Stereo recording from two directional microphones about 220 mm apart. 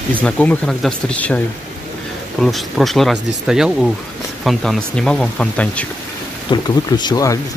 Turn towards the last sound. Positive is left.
turn(degrees=15)  # may be behind; listen again after turning